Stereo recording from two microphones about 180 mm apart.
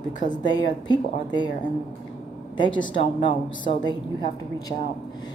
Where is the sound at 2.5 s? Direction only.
25° left (ahead or behind).